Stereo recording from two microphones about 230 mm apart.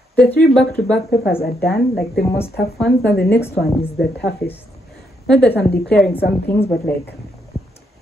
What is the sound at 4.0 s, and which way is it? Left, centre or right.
A woman's voice, centre.